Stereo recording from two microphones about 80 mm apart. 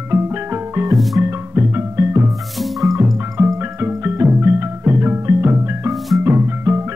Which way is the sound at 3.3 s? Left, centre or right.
Right.